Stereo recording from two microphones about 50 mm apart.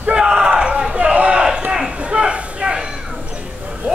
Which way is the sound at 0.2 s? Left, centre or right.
Centre.